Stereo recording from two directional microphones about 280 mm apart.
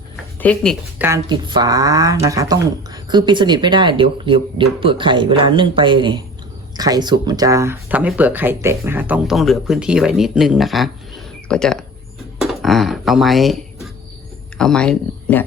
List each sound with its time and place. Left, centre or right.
0.3 s speech: centre
12.4 s a sound: centre
14.6 s speech: centre